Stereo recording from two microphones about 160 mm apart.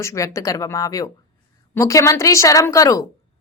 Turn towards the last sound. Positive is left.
turn(degrees=20)  # may be behind; listen again after turning